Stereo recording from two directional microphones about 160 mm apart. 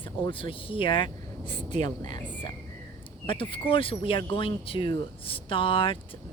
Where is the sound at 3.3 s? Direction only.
35° left (ahead or behind).